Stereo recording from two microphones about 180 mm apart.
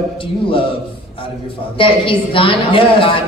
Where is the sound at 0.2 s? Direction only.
30° left (ahead or behind).